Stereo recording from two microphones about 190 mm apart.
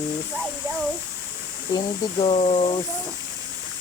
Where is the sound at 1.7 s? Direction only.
30° left (ahead or behind).